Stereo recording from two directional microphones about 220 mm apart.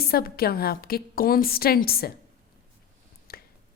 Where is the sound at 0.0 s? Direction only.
45° left (ahead or behind).